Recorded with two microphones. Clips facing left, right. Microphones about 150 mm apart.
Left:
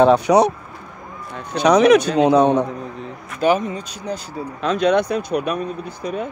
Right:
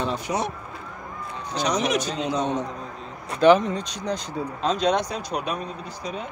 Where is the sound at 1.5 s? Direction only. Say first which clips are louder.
Left 12 dB; 60° left (ahead or behind).